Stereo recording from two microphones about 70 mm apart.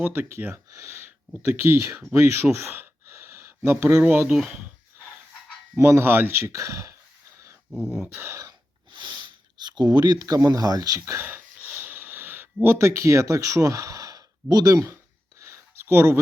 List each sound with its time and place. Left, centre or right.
0.0 s speech: right
2.1 s a sound: right
4.0 s speech: centre
5.7 s speech: right
7.7 s a sound: centre
8.1 s speech: right
9.0 s sniff: right
10.2 s speech: right
11.0 s speech: right
11.3 s wheeze: right
12.6 s speech: right
12.9 s speech: right
15.4 s a sound: right